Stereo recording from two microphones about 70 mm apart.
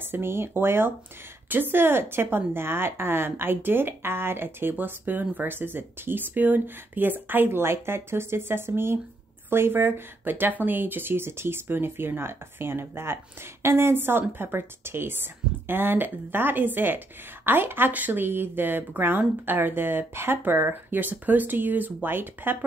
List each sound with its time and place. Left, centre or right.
0.0 s a woman's voice: right